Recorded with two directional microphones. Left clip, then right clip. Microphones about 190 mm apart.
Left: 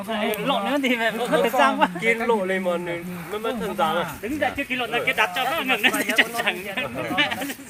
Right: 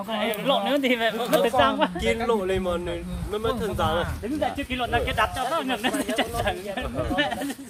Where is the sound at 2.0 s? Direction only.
65° right (ahead or behind).